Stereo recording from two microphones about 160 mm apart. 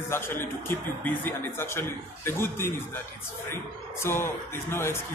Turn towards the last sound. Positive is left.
turn(degrees=15)  # may be behind; listen again after turning